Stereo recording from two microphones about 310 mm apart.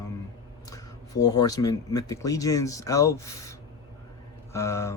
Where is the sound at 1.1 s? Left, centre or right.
Left.